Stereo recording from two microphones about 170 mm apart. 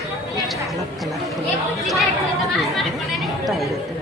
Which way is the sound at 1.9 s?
Centre (ahead or behind).